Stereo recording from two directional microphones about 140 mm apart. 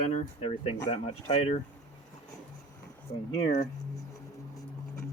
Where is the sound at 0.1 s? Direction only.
45° left (ahead or behind).